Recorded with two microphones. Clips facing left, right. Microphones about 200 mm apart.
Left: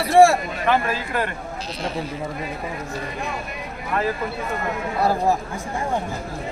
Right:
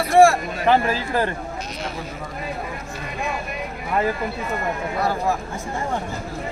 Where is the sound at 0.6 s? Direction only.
30° right (ahead or behind).